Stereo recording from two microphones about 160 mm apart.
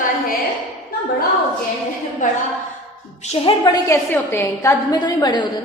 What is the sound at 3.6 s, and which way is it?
A woman's voice, 25° left (ahead or behind).